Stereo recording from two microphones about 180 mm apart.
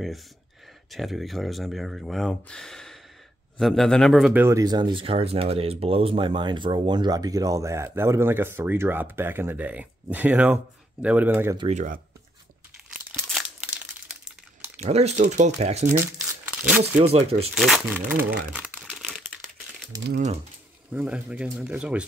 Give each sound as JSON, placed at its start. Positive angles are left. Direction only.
{"t": 0.9, "sound": "a man's voice", "side_deg": 0}
{"t": 11.5, "sound": "speech", "side_deg": -30}
{"t": 13.1, "sound": "crumpling", "side_deg": 0}
{"t": 14.8, "sound": "speech", "side_deg": -35}
{"t": 15.9, "sound": "crumpling", "side_deg": -15}
{"t": 16.8, "sound": "speech", "side_deg": -35}
{"t": 17.6, "sound": "a man's voice", "side_deg": 0}
{"t": 18.5, "sound": "crumpling", "side_deg": -5}
{"t": 20.9, "sound": "speech", "side_deg": -5}